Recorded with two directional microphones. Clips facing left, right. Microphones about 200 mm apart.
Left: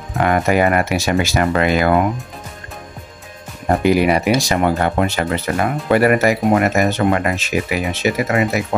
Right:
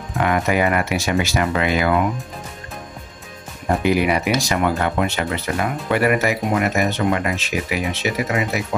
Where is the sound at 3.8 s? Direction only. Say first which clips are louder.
Left 4 dB; 40° left (ahead or behind).